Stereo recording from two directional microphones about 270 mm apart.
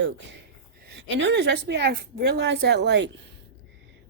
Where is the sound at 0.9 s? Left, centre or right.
Right.